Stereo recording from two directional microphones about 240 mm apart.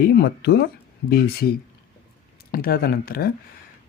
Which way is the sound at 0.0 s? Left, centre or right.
Left.